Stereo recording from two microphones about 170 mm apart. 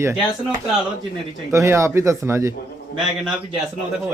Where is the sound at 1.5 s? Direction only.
15° right (ahead or behind).